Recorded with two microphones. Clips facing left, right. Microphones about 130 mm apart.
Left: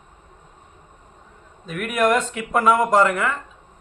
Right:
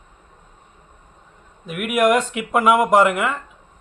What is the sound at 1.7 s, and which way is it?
A man's voice, 10° right (ahead or behind).